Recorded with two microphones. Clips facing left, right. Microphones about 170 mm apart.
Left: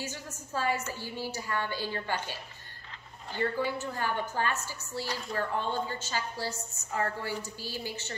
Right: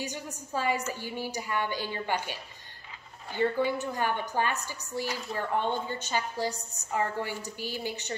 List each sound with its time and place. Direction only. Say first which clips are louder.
0.0 s speech: right 3 dB; 15° right (ahead or behind)
3.3 s speech: right 4 dB; 15° right (ahead or behind)